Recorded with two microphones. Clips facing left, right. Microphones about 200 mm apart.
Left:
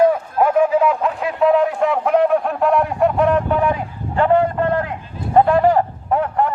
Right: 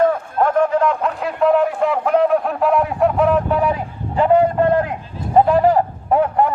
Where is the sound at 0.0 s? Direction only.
10° left (ahead or behind).